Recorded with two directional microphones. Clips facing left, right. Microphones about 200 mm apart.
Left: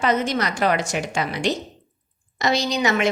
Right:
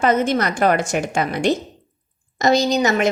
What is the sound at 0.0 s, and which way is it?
A woman's voice, 50° right (ahead or behind).